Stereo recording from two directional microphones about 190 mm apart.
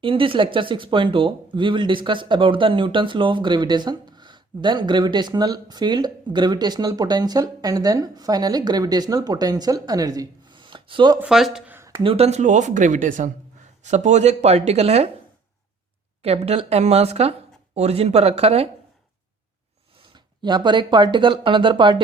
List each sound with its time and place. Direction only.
0.0 s speech: 30° right (ahead or behind)
11.2 s speech: centre (ahead or behind)
11.8 s a sound: 15° right (ahead or behind)
12.0 s speech: 35° right (ahead or behind)
16.2 s speech: 35° right (ahead or behind)
20.1 s speech: 25° right (ahead or behind)